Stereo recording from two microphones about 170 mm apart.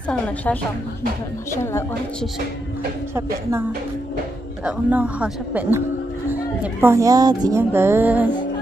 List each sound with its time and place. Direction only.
1.5 s a woman's voice: 15° left (ahead or behind)
3.2 s music: 15° right (ahead or behind)
4.6 s music: 10° right (ahead or behind)